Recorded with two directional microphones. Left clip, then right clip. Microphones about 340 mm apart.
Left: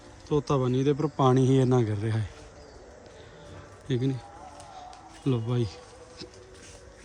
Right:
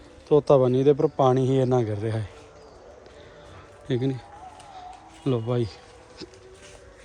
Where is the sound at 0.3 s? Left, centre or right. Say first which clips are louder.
Right 9 dB; centre.